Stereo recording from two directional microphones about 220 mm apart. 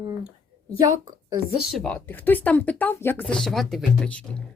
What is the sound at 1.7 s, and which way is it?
Speech, 5° left (ahead or behind).